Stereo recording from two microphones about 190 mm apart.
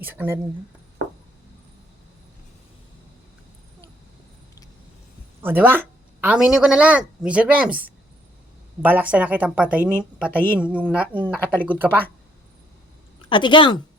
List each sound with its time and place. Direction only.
0.0 s speech: 10° right (ahead or behind)
5.4 s speech: 10° right (ahead or behind)
10.3 s a woman's voice: 10° left (ahead or behind)
10.6 s speech: 5° right (ahead or behind)
13.3 s a woman's voice: 25° left (ahead or behind)